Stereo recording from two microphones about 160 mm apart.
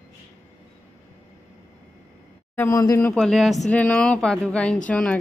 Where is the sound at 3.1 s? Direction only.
Centre (ahead or behind).